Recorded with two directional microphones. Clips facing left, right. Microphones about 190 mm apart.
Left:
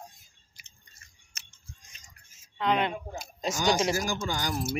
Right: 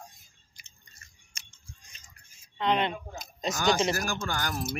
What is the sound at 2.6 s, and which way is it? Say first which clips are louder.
Speech: even; 5° left (ahead or behind).